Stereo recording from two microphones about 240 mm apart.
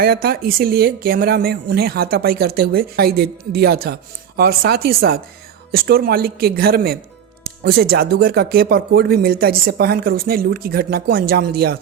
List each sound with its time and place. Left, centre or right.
0.0 s speech: right